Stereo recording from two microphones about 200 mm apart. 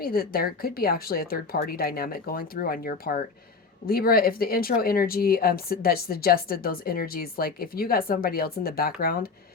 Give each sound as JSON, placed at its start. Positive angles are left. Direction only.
{"t": 0.0, "sound": "speech", "side_deg": 50}